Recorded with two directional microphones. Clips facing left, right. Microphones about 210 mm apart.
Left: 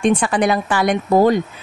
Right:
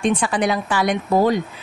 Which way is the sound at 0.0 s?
50° left (ahead or behind).